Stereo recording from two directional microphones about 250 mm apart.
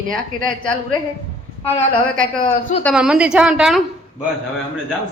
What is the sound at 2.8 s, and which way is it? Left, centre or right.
Speech, centre.